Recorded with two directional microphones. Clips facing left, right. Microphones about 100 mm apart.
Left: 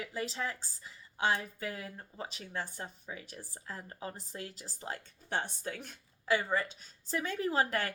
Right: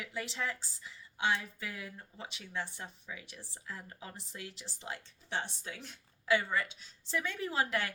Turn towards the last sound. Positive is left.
turn(degrees=40)  # may be behind; listen again after turning